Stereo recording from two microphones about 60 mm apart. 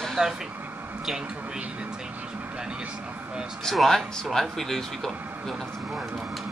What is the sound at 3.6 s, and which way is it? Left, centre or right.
Speech, centre.